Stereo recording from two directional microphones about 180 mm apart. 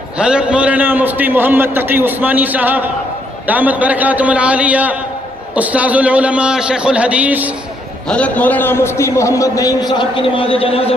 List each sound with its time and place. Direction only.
0.2 s a man's voice: 5° right (ahead or behind)
8.0 s a man's voice: 5° left (ahead or behind); by 10.9 s 30° left (ahead or behind)